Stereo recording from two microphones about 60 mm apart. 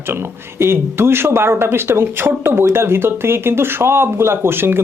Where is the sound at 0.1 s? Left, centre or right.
Right.